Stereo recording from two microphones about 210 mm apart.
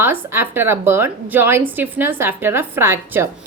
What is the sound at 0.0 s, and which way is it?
A woman's voice, 10° right (ahead or behind).